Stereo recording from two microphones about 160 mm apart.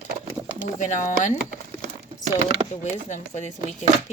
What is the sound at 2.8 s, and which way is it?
Speech, 45° left (ahead or behind).